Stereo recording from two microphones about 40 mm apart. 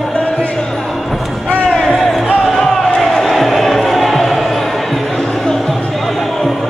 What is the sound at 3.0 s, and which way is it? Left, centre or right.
Music, centre.